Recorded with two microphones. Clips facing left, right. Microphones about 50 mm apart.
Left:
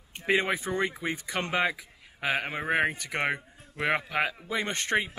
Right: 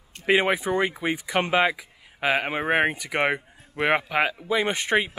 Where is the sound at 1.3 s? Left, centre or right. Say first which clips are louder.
Right 6 dB; centre.